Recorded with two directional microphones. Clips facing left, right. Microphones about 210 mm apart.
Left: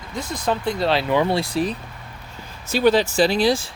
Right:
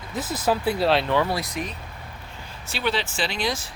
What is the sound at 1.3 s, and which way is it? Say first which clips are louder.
Speech: left 7 dB; 30° left (ahead or behind).